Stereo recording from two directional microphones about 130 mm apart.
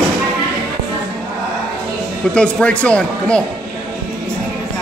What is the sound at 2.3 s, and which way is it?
A man's voice, 10° left (ahead or behind).